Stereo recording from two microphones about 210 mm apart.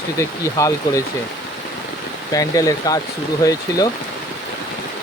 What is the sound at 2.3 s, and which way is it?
Speech, 15° left (ahead or behind).